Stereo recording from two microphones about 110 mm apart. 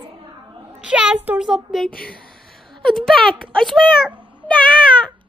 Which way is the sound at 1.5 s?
Centre (ahead or behind).